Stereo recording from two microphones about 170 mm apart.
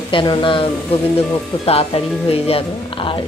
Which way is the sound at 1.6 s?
35° left (ahead or behind).